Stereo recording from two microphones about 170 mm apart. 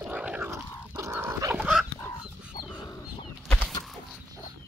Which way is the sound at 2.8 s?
20° left (ahead or behind).